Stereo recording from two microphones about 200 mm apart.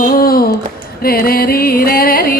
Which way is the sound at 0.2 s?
50° left (ahead or behind).